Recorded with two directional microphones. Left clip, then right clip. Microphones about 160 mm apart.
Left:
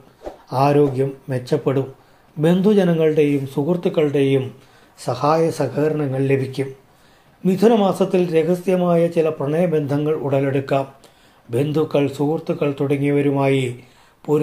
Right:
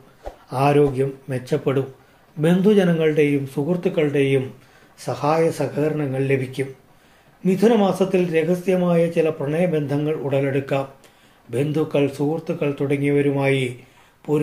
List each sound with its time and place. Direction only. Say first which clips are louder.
0.5 s speech: left 1 dB; 25° left (ahead or behind)